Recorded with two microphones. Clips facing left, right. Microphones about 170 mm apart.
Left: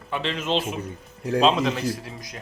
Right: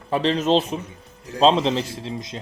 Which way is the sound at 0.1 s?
35° right (ahead or behind).